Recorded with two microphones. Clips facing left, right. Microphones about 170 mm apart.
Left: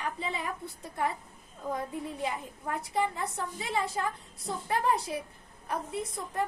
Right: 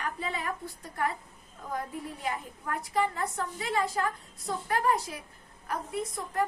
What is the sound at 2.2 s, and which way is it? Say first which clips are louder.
A woman's voice: right 2 dB; 25° left (ahead or behind).